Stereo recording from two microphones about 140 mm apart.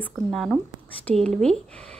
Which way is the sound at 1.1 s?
50° right (ahead or behind).